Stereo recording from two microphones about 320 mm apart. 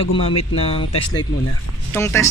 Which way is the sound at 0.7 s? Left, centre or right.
Centre.